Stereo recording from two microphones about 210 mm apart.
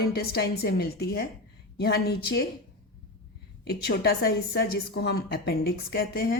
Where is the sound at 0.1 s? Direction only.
50° left (ahead or behind).